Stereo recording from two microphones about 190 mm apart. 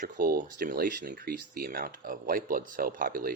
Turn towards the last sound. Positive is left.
turn(degrees=-45)  # may be behind; listen again after turning